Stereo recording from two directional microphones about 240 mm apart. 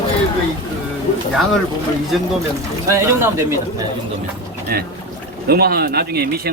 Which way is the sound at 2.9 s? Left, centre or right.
Centre.